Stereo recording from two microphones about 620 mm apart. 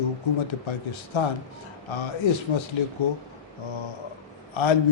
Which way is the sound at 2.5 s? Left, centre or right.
Left.